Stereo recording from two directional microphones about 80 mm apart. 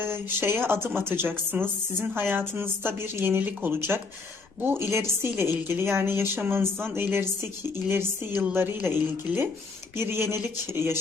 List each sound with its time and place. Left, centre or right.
0.0 s speech: right